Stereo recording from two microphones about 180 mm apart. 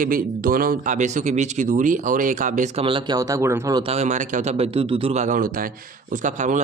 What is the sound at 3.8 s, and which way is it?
Speech, 35° right (ahead or behind).